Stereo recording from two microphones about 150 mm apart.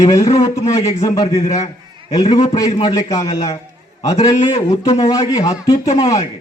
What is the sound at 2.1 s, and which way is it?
A man's voice, 25° left (ahead or behind).